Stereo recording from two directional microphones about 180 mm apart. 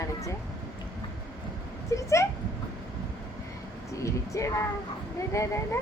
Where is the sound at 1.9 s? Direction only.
15° left (ahead or behind).